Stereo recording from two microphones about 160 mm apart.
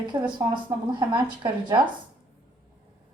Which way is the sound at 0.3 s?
30° right (ahead or behind).